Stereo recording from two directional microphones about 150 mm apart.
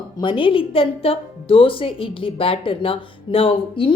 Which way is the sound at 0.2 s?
30° left (ahead or behind).